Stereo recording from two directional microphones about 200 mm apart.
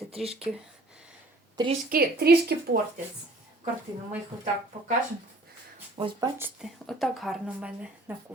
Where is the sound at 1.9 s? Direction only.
50° right (ahead or behind).